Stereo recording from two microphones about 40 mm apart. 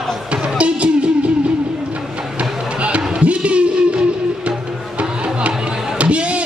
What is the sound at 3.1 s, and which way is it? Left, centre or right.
Music, right.